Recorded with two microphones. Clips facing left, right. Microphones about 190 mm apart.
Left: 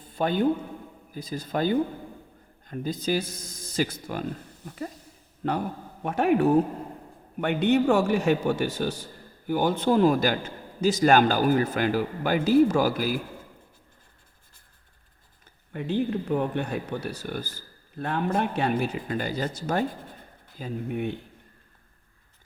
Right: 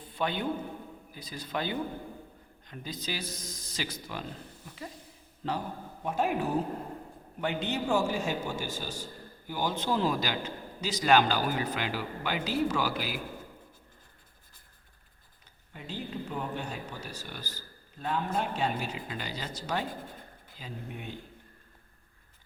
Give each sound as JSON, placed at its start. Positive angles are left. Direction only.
{"t": 0.0, "sound": "a sound", "side_deg": 45}
{"t": 1.1, "sound": "a man's voice", "side_deg": 45}
{"t": 5.4, "sound": "a man's voice", "side_deg": 60}
{"t": 15.7, "sound": "speech", "side_deg": 55}